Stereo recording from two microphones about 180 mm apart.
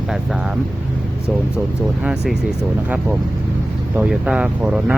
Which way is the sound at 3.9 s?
5° right (ahead or behind).